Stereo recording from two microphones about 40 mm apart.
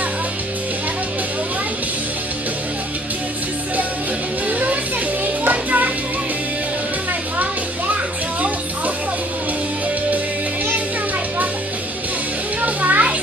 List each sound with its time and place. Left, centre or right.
4.5 s music: right
7.9 s music: right
12.6 s children playing: right